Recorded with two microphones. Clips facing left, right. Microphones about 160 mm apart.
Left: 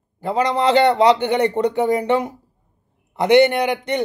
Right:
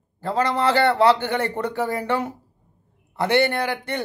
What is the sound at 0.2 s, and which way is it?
A man's voice, 15° left (ahead or behind).